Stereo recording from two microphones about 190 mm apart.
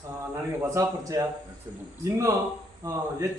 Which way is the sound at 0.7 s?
15° right (ahead or behind).